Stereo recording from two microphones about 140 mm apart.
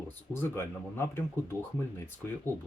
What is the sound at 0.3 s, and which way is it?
Speech, 25° left (ahead or behind).